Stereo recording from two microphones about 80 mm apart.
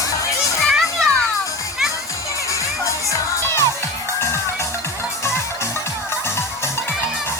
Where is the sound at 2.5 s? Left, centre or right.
Left.